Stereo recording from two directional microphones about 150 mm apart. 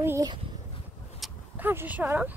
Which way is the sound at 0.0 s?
15° right (ahead or behind).